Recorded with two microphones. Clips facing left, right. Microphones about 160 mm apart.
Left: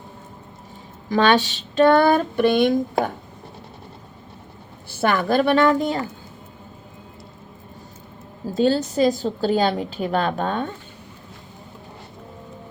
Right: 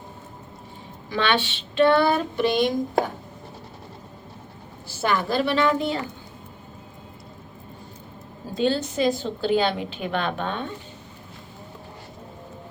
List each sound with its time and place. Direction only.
1.1 s female singing: 40° left (ahead or behind)
4.9 s female singing: 55° left (ahead or behind)
8.5 s a woman's voice: 40° left (ahead or behind)